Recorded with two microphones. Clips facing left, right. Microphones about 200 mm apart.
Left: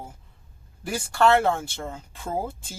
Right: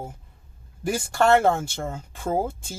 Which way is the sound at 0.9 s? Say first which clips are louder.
Right 1 dB; 45° right (ahead or behind).